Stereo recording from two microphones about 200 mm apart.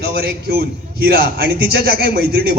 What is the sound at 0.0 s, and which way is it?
A man's voice, 55° right (ahead or behind).